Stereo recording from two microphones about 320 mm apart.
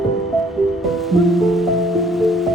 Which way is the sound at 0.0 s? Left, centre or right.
Centre.